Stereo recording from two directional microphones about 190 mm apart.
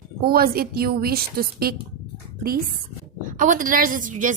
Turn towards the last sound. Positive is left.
turn(degrees=-40)  # may be behind; listen again after turning